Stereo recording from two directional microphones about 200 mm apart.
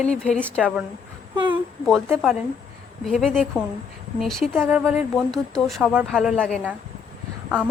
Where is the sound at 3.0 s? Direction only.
Centre (ahead or behind).